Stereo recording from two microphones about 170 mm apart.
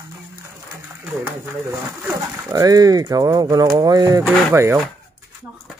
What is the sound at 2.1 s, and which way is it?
Speech, 20° right (ahead or behind).